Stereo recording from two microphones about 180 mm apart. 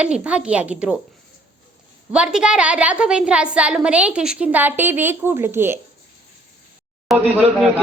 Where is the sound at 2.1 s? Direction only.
5° right (ahead or behind).